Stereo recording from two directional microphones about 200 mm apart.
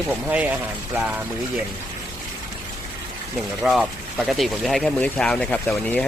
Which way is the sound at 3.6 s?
Centre (ahead or behind).